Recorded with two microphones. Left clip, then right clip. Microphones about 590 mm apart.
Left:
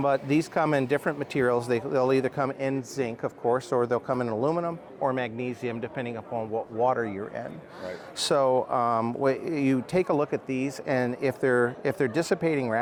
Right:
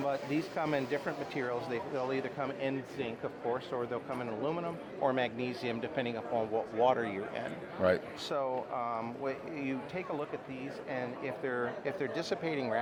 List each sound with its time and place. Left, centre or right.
0.0 s speech: left
3.5 s speech: left
5.0 s speech: left
8.2 s speech: left
10.8 s speech: left